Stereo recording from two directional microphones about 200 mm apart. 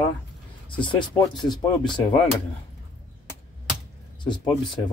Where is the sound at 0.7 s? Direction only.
25° left (ahead or behind).